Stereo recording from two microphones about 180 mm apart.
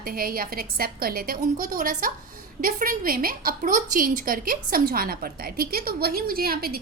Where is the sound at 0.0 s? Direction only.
55° right (ahead or behind).